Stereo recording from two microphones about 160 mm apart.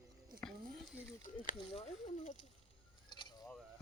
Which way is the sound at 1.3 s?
55° left (ahead or behind).